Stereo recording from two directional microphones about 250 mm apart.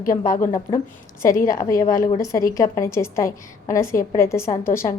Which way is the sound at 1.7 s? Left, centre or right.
Left.